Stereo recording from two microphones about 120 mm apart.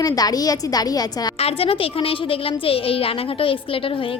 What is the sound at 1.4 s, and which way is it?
A woman's voice, 55° left (ahead or behind).